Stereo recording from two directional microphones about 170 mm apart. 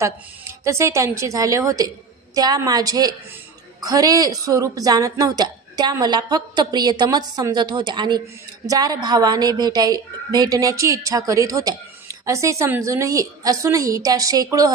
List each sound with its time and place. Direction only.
0.7 s a woman's voice: 15° right (ahead or behind)